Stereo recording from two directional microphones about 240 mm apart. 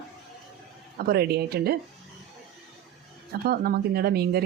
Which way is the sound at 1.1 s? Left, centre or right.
Right.